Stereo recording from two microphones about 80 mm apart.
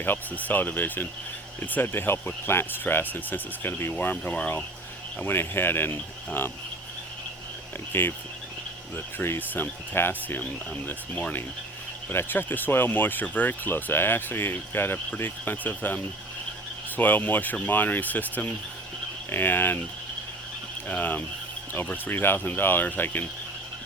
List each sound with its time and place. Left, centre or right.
0.0 s speech: left
7.9 s speech: left
17.0 s speech: left
20.8 s speech: left